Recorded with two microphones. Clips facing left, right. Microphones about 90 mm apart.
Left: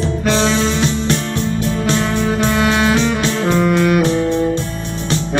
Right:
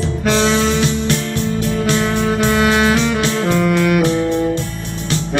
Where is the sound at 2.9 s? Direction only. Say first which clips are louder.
Even; 30° left (ahead or behind).